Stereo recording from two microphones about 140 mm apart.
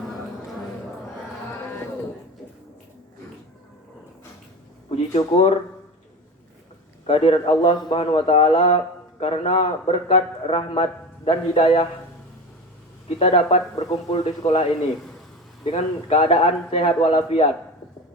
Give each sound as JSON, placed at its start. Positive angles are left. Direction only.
{"t": 4.9, "sound": "speech", "side_deg": 50}
{"t": 7.1, "sound": "a man's voice", "side_deg": 40}
{"t": 13.1, "sound": "a man's voice", "side_deg": 45}